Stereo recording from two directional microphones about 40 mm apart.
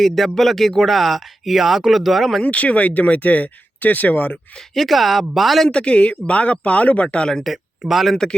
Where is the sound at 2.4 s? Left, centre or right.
Left.